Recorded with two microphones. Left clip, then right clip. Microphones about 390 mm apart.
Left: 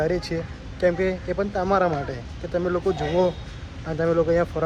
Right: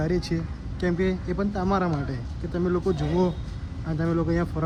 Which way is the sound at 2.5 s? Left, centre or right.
Left.